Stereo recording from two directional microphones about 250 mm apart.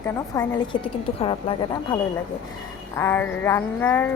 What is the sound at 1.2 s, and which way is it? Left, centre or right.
Speech, centre.